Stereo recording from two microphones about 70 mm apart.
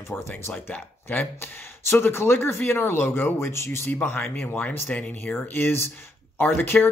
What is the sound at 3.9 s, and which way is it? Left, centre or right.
Speech, left.